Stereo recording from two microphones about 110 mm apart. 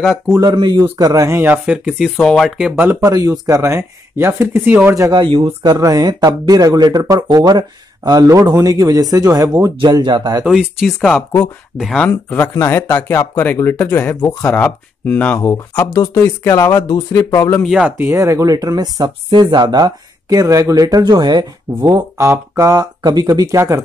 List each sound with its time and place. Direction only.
0.3 s speech: 35° right (ahead or behind); by 2.8 s 5° right (ahead or behind)
2.8 s speech: 20° right (ahead or behind)
3.1 s speech: 35° right (ahead or behind)
5.2 s speech: 50° right (ahead or behind)
5.6 s speech: 35° right (ahead or behind)
10.4 s speech: 5° right (ahead or behind); by 12.4 s 15° left (ahead or behind)
12.5 s speech: 25° left (ahead or behind)
13.4 s speech: 20° left (ahead or behind)
15.8 s speech: 35° left (ahead or behind)
17.8 s speech: 20° right (ahead or behind)